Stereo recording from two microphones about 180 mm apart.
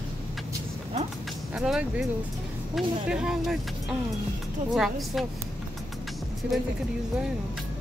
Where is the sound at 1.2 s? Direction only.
Centre (ahead or behind).